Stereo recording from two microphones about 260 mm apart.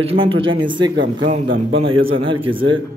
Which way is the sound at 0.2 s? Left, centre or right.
Centre.